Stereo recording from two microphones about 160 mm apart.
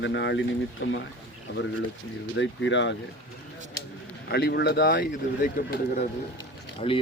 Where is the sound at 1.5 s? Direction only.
90° left.